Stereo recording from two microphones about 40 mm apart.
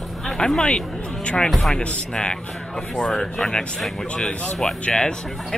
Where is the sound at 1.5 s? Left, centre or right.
Centre.